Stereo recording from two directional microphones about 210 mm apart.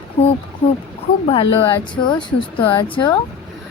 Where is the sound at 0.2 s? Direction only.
30° left (ahead or behind).